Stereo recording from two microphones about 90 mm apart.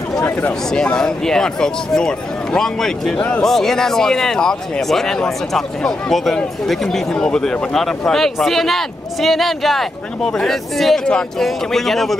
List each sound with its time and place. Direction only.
0.4 s speech: 10° left (ahead or behind)